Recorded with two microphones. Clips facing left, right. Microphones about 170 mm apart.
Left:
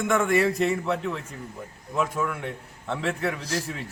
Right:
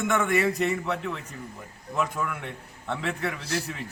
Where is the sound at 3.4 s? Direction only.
40° left (ahead or behind).